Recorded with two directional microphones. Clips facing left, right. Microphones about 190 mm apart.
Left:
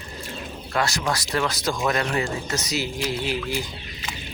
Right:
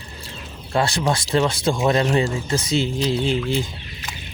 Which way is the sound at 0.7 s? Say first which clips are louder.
Right 4 dB; 30° right (ahead or behind).